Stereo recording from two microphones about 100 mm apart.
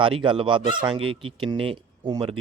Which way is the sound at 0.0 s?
60° right (ahead or behind).